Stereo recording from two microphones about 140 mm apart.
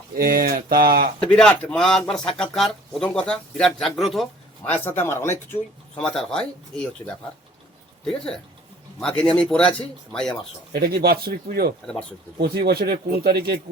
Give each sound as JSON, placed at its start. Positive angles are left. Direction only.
{"t": 0.2, "sound": "speech", "side_deg": -90}
{"t": 1.2, "sound": "speech", "side_deg": 5}
{"t": 4.8, "sound": "speech", "side_deg": 15}
{"t": 6.0, "sound": "speech", "side_deg": 5}
{"t": 10.8, "sound": "speech", "side_deg": -90}